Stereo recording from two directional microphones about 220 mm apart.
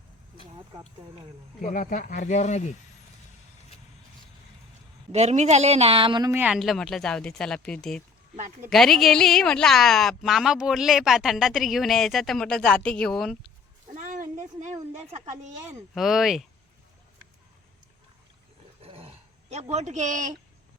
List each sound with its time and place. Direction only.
1.6 s speech: 35° left (ahead or behind)
5.1 s a woman's voice: 30° right (ahead or behind); by 13.5 s centre (ahead or behind)
13.9 s a sound: 35° right (ahead or behind)
15.6 s a woman's voice: centre (ahead or behind)
18.8 s roar: 25° right (ahead or behind)